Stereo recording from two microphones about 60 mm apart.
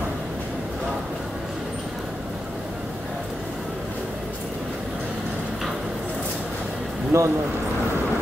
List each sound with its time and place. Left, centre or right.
7.1 s speech: right